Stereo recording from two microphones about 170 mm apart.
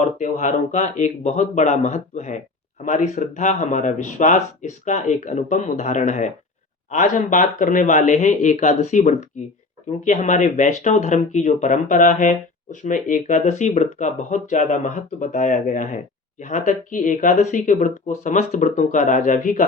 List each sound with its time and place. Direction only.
0.0 s speech: 45° left (ahead or behind)